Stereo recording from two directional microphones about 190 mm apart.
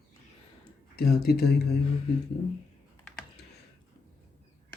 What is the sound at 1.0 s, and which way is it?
Speech, 55° left (ahead or behind).